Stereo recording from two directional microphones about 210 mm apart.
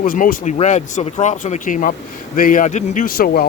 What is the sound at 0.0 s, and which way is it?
Speech, 40° left (ahead or behind).